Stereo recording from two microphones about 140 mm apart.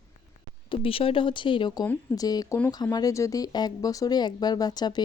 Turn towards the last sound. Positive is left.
turn(degrees=30)  # may be behind; listen again after turning